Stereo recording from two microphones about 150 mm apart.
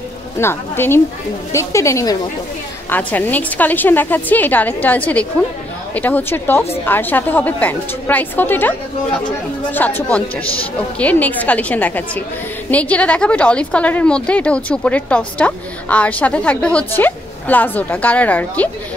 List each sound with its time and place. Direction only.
0.4 s a woman's voice: 15° left (ahead or behind)